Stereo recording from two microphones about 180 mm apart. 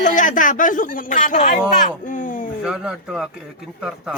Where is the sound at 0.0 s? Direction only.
45° left (ahead or behind).